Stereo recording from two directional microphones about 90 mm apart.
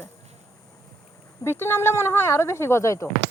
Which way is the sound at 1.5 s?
25° left (ahead or behind).